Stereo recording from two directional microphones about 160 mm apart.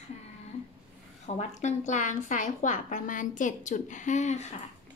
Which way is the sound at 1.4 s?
45° left (ahead or behind).